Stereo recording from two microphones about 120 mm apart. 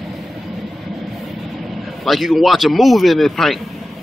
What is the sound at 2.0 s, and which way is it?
Speech, centre (ahead or behind).